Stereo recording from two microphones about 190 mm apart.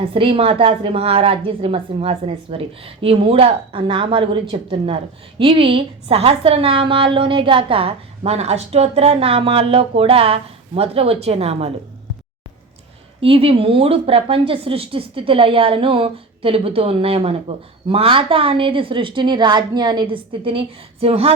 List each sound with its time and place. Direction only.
0.0 s a woman's voice: 30° right (ahead or behind)
13.2 s a woman's voice: 30° right (ahead or behind)